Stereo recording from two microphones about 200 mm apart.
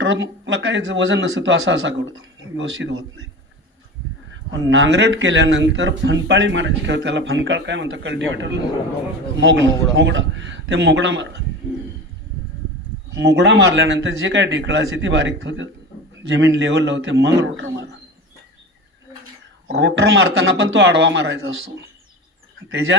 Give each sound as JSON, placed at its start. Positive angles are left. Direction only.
{"t": 0.0, "sound": "a man's voice", "side_deg": -65}
{"t": 4.3, "sound": "a man's voice", "side_deg": -70}
{"t": 13.1, "sound": "a man's voice", "side_deg": -60}
{"t": 19.6, "sound": "a man's voice", "side_deg": -60}
{"t": 22.9, "sound": "speech", "side_deg": -65}